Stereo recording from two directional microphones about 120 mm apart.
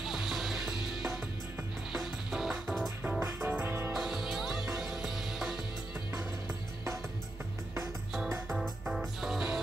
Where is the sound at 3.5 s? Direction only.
15° right (ahead or behind).